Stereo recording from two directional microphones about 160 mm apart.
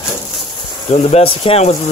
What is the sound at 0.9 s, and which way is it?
Speech, 40° left (ahead or behind).